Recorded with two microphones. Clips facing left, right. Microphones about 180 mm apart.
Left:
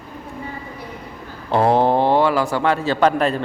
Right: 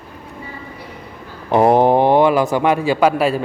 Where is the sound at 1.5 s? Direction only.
15° right (ahead or behind).